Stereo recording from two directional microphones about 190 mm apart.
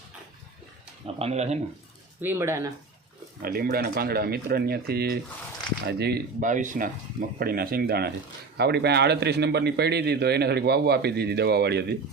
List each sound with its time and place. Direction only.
1.0 s speech: 35° right (ahead or behind)
2.2 s speech: 15° right (ahead or behind)
3.4 s a man's voice: 50° right (ahead or behind)
6.4 s a man's voice: 40° right (ahead or behind); by 11.9 s 60° right (ahead or behind)